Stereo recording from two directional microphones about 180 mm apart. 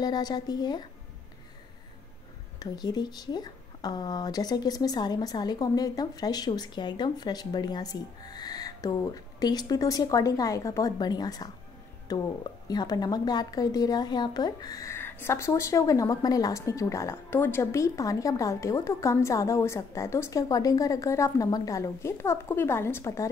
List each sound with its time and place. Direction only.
0.0 s speech: 20° left (ahead or behind)
2.6 s a woman's voice: 20° left (ahead or behind)